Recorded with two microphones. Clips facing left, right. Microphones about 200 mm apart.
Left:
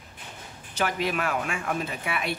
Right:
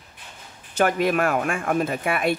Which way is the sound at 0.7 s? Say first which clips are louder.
Right 7 dB; 50° right (ahead or behind).